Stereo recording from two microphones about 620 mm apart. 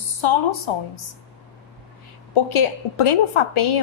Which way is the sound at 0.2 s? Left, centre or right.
Left.